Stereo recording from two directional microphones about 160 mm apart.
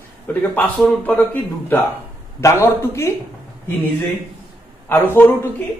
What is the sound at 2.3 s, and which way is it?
Speech, 15° left (ahead or behind).